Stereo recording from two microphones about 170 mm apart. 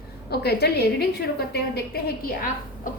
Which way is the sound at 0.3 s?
70° left (ahead or behind).